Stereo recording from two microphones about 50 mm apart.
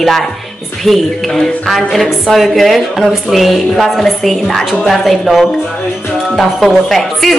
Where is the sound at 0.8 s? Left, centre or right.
Centre.